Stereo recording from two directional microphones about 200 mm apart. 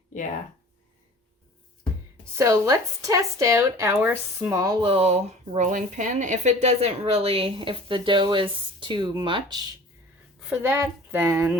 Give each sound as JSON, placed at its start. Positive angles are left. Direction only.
{"t": 2.2, "sound": "speech", "side_deg": -15}